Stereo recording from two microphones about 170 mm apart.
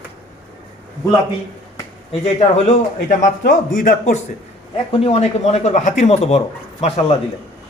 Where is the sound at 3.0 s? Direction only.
50° left (ahead or behind).